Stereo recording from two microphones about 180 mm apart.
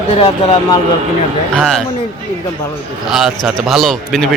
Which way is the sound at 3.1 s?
Centre (ahead or behind).